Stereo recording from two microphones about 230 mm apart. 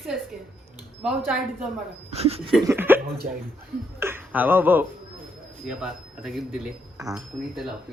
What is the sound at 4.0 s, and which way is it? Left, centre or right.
Speech, centre.